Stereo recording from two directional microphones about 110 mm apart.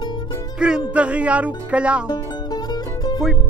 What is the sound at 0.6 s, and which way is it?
Music, 10° right (ahead or behind).